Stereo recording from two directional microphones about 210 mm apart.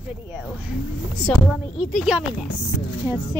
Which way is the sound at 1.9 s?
Centre (ahead or behind).